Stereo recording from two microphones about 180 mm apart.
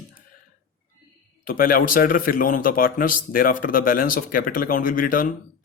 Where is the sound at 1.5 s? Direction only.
50° left (ahead or behind).